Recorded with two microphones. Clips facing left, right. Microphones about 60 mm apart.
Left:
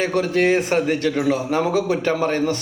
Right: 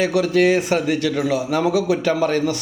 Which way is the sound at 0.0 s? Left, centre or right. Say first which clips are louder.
Right 2 dB; left.